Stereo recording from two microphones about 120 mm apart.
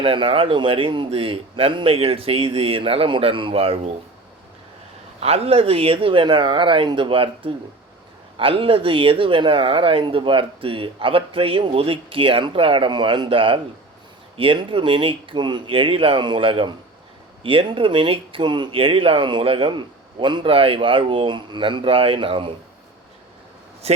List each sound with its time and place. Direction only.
0.0 s speech: 45° right (ahead or behind)
5.2 s speech: 60° right (ahead or behind)
23.8 s speech: 60° right (ahead or behind)